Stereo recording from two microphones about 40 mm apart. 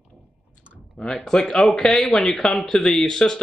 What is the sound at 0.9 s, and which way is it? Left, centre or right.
A man's voice, left.